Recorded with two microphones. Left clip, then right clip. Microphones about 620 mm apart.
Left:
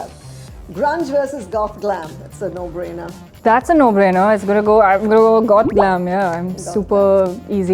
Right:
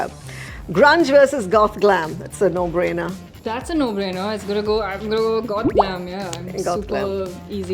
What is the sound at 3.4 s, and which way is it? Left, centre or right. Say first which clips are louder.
Speech: left 11 dB; left.